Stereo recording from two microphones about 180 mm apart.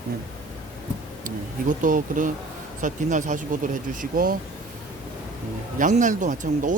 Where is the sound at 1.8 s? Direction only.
45° right (ahead or behind).